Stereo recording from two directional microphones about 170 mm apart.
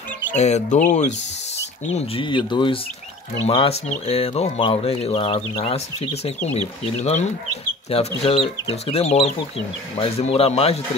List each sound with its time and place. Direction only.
0.4 s speech: 40° left (ahead or behind)
2.0 s speech: 30° left (ahead or behind)
7.9 s speech: 35° left (ahead or behind)